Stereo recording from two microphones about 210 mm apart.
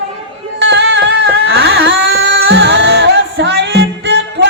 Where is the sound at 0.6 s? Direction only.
60° right (ahead or behind).